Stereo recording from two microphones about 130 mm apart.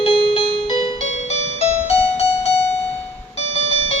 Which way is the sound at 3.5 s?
50° left (ahead or behind).